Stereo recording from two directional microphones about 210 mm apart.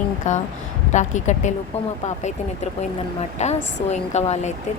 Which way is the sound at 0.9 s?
35° left (ahead or behind).